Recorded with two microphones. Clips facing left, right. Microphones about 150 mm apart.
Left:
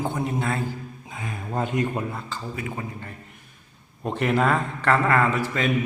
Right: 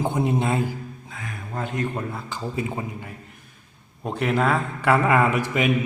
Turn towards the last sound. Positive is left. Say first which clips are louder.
# right 2 dB
turn(degrees=-15)  # may be behind; listen again after turning